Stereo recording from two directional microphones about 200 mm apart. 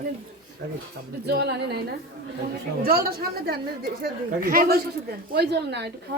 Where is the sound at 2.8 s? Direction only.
50° right (ahead or behind).